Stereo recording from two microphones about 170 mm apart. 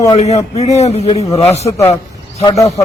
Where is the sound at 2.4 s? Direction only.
20° left (ahead or behind).